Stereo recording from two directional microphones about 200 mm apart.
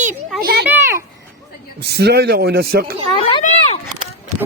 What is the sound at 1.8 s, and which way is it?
A man's voice, 55° right (ahead or behind).